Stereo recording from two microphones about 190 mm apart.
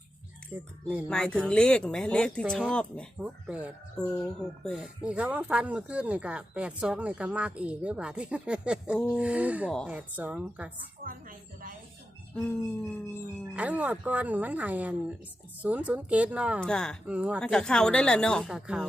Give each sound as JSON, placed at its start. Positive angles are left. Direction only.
{"t": 0.5, "sound": "speech", "side_deg": -5}
{"t": 1.0, "sound": "speech", "side_deg": 5}
{"t": 3.2, "sound": "speech", "side_deg": -5}
{"t": 4.0, "sound": "speech", "side_deg": 5}
{"t": 11.0, "sound": "music", "side_deg": -45}
{"t": 13.6, "sound": "speech", "side_deg": -10}
{"t": 16.6, "sound": "speech", "side_deg": 5}
{"t": 17.1, "sound": "speech", "side_deg": -5}
{"t": 17.4, "sound": "speech", "side_deg": 5}